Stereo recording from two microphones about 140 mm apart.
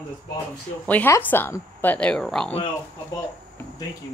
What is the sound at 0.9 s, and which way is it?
A woman's voice, 15° left (ahead or behind).